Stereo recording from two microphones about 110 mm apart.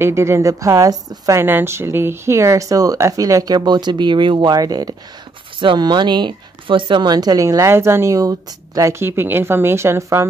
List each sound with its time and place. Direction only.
0.0 s a woman's voice: 25° right (ahead or behind)
1.4 s a woman's voice: 20° right (ahead or behind)